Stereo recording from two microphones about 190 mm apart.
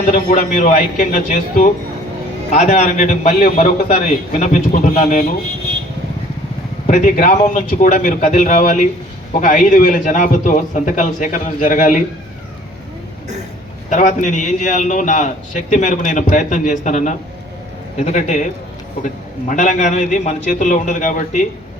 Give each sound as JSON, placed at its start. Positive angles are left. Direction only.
{"t": 0.0, "sound": "a man's voice", "side_deg": 45}
{"t": 6.8, "sound": "a man's voice", "side_deg": 40}
{"t": 13.9, "sound": "a man's voice", "side_deg": 45}